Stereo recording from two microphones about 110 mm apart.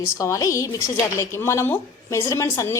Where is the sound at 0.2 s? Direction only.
30° left (ahead or behind).